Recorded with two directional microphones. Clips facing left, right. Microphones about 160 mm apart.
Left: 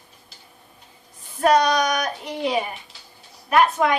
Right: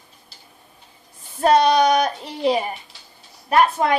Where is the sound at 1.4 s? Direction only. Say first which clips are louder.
Right 3 dB; 30° right (ahead or behind).